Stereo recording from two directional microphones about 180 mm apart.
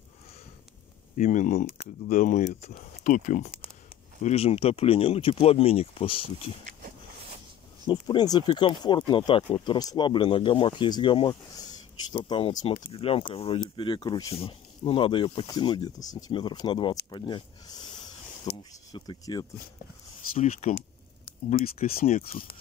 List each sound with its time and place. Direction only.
1.1 s speech: 45° left (ahead or behind)
7.8 s speech: 25° left (ahead or behind)
17.1 s a sound: 25° left (ahead or behind)
18.6 s speech: 20° left (ahead or behind)
21.7 s speech: 35° left (ahead or behind)
22.3 s speech: 50° left (ahead or behind)